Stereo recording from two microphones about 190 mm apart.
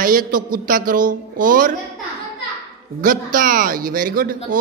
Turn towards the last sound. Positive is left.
turn(degrees=-50)  # may be behind; listen again after turning